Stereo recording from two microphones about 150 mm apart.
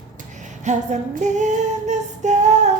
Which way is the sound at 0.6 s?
50° right (ahead or behind).